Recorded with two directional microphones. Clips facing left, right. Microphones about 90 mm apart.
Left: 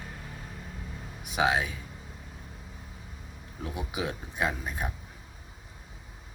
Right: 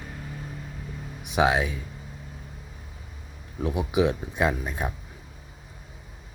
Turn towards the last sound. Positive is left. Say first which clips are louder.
# right 5 dB
turn(degrees=-20)  # may be behind; listen again after turning